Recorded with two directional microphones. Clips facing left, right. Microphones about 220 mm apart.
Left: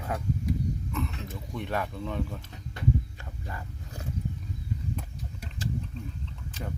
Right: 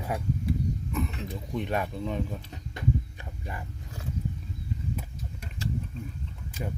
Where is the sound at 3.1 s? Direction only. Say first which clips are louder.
Right 1 dB; 15° right (ahead or behind).